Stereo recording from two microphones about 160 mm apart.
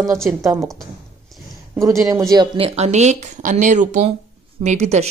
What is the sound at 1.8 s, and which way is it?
A woman's voice, 20° right (ahead or behind).